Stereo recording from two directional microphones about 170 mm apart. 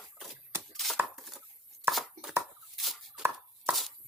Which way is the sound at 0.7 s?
Centre (ahead or behind).